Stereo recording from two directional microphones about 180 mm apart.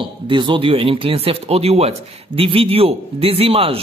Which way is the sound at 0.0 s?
25° right (ahead or behind).